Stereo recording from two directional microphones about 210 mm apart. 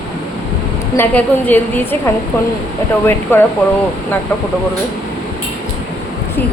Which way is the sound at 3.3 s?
10° left (ahead or behind).